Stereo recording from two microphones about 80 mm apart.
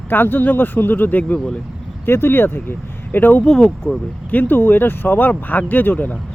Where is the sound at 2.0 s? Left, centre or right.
Left.